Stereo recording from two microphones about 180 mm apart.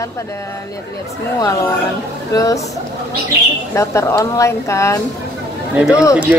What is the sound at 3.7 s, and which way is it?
Speech, 15° left (ahead or behind).